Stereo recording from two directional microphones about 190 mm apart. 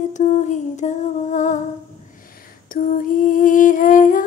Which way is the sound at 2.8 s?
45° left (ahead or behind).